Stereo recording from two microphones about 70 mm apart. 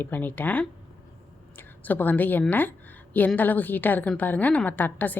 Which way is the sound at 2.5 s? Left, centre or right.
Left.